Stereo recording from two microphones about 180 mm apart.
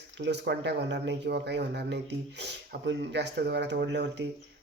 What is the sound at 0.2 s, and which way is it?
Speech, 70° right (ahead or behind).